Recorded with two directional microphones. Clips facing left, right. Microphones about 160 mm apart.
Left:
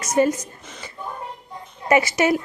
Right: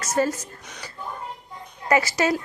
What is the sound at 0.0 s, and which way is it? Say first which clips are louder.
Speech: left 4 dB; 20° left (ahead or behind).